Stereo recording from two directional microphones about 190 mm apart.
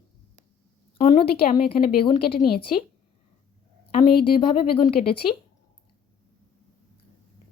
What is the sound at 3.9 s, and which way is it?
A woman's voice, 30° left (ahead or behind).